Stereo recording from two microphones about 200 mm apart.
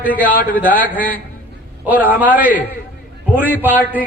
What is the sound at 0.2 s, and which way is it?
Speech, 10° right (ahead or behind).